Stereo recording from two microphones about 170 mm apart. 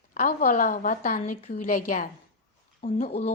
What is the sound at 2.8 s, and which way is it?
Speech, 40° left (ahead or behind).